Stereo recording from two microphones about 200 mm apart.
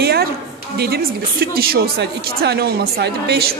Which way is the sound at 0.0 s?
50° right (ahead or behind).